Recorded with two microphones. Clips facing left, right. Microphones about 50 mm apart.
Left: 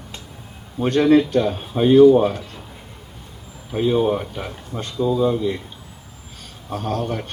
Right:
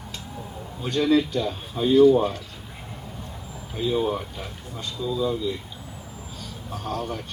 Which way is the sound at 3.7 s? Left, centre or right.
Left.